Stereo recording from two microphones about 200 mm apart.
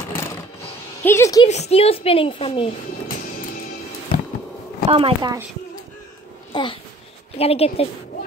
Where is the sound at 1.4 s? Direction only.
30° left (ahead or behind).